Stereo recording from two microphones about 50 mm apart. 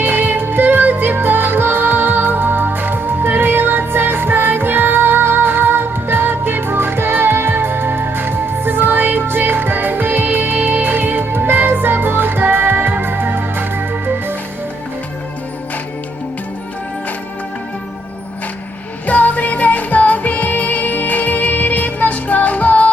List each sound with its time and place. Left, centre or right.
0.0 s music: right
19.0 s music: left